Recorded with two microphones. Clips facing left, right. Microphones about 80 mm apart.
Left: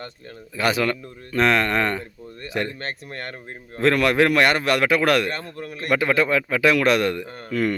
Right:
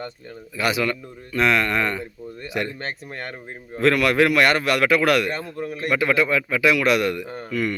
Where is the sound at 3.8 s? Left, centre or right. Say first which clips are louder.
Even; left.